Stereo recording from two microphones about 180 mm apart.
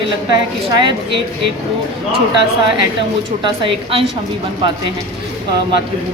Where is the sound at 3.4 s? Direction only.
30° right (ahead or behind).